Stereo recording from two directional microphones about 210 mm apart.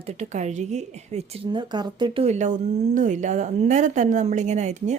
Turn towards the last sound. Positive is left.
turn(degrees=-35)  # may be behind; listen again after turning